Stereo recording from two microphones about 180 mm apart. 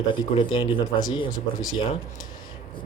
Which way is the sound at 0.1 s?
25° left (ahead or behind).